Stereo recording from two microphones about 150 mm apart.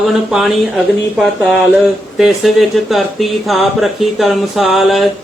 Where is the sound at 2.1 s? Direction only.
Centre (ahead or behind).